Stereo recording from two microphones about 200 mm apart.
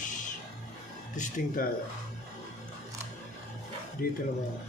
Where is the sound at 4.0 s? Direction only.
45° left (ahead or behind).